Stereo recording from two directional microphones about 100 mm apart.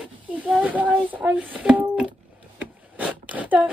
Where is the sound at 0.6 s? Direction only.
15° right (ahead or behind).